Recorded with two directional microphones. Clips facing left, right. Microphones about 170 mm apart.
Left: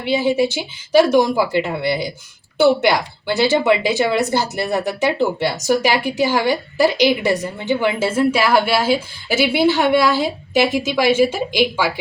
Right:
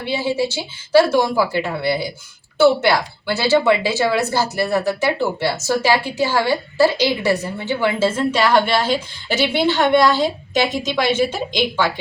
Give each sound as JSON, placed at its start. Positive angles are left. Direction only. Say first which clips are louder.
{"t": 0.1, "sound": "speech", "louder": "left 4 dB", "side_deg": 15}